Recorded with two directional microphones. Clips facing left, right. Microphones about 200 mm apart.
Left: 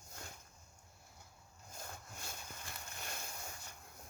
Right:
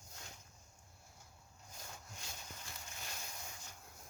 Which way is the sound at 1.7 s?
50° left (ahead or behind).